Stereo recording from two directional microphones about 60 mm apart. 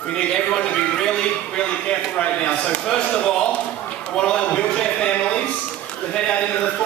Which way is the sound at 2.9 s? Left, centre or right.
Centre.